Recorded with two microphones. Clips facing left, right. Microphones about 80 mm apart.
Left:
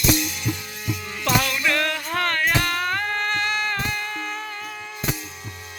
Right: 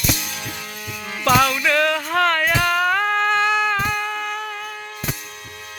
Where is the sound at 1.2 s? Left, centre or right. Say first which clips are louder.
Right 5 dB; right.